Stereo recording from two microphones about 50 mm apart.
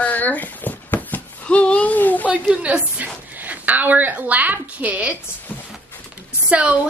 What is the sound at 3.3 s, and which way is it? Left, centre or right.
A woman's voice, right.